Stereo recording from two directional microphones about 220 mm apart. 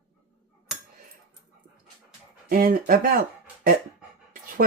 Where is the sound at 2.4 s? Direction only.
40° right (ahead or behind).